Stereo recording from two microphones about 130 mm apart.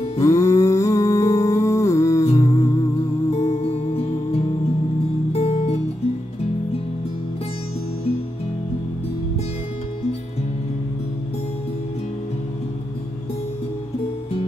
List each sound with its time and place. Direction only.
0.2 s a sound: 25° left (ahead or behind)
2.3 s humming: 25° left (ahead or behind)
3.3 s music: 55° left (ahead or behind)
5.3 s guitar: 45° left (ahead or behind)